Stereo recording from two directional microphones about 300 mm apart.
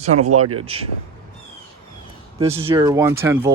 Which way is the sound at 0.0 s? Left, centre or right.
Right.